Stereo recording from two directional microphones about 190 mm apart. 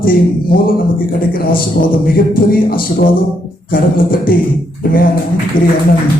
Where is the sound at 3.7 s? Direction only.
50° left (ahead or behind).